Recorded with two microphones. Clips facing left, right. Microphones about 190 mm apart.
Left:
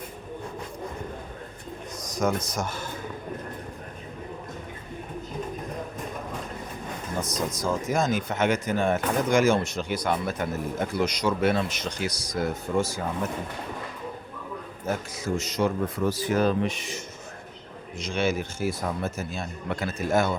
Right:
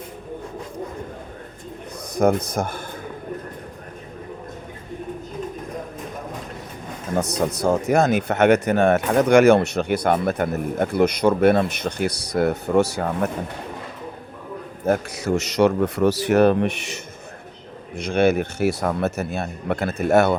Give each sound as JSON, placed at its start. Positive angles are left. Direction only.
{"t": 2.0, "sound": "speech", "side_deg": -55}
{"t": 7.2, "sound": "speech", "side_deg": -65}
{"t": 14.8, "sound": "speech", "side_deg": -65}
{"t": 17.9, "sound": "speech", "side_deg": -60}